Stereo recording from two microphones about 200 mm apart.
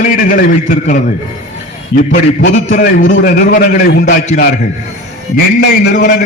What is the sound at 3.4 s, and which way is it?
A man's voice, 55° left (ahead or behind).